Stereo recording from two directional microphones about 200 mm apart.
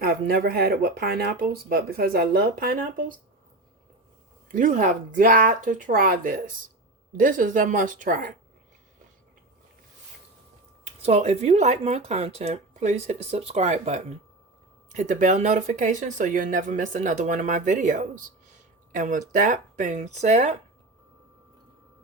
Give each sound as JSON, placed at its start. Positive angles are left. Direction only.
{"t": 0.0, "sound": "speech", "side_deg": -50}
{"t": 4.4, "sound": "speech", "side_deg": -40}
{"t": 10.8, "sound": "speech", "side_deg": -35}